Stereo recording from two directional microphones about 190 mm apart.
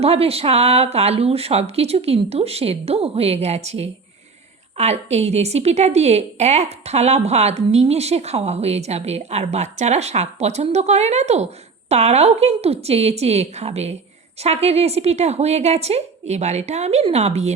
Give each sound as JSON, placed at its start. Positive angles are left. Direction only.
{"t": 0.0, "sound": "a woman's voice", "side_deg": -30}